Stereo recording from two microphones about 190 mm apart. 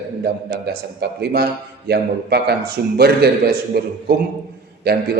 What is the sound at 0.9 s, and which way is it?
A man's voice, 60° right (ahead or behind).